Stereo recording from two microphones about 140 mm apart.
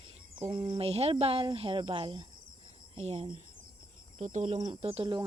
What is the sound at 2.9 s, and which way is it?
Speech, 45° right (ahead or behind).